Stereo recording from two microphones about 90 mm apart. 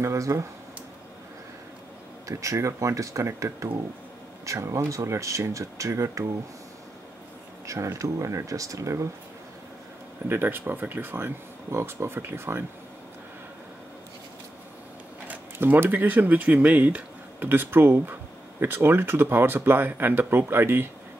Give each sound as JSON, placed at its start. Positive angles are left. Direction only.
{"t": 0.0, "sound": "speech", "side_deg": -35}
{"t": 2.2, "sound": "speech", "side_deg": -35}
{"t": 7.6, "sound": "speech", "side_deg": -35}
{"t": 10.2, "sound": "speech", "side_deg": -25}
{"t": 15.2, "sound": "speech", "side_deg": -20}